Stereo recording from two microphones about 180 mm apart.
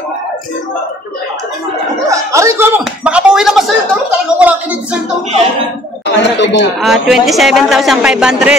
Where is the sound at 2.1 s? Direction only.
15° right (ahead or behind).